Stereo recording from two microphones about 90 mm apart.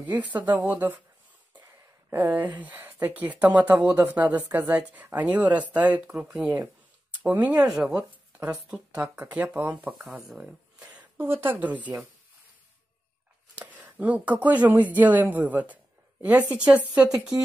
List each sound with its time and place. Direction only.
0.0 s a woman's voice: 15° right (ahead or behind)
2.0 s a woman's voice: 20° right (ahead or behind)
7.6 s a woman's voice: 5° right (ahead or behind)
9.9 s speech: centre (ahead or behind)
10.4 s a sound: 15° right (ahead or behind)
11.1 s speech: 25° right (ahead or behind)
13.6 s speech: 20° right (ahead or behind)